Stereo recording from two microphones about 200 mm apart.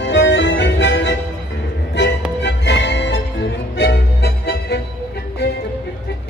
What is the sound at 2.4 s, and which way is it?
Music, 60° left (ahead or behind).